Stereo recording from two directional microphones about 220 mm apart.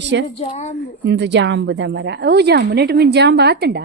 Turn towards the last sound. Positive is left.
turn(degrees=-50)  # may be behind; listen again after turning